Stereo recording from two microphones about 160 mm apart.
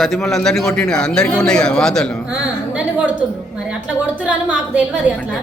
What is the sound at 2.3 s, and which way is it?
A woman's voice, 10° right (ahead or behind).